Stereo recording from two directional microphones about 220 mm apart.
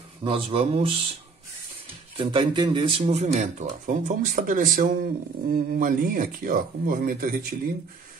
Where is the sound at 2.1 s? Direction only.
25° right (ahead or behind); by 7.4 s 40° right (ahead or behind).